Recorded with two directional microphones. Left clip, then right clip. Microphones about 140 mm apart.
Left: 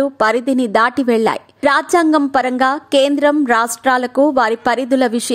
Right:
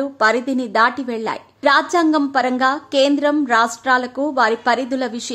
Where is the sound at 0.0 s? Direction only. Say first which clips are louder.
Left 2 dB; 45° left (ahead or behind).